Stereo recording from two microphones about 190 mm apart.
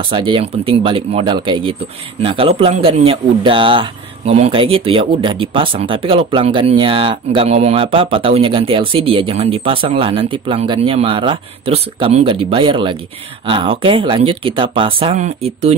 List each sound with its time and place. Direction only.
0.0 s speech: 25° right (ahead or behind)